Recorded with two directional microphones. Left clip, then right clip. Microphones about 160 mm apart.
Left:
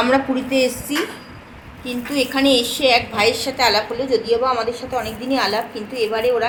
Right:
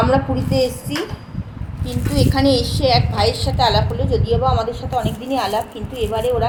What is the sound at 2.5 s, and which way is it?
Speech, 50° left (ahead or behind).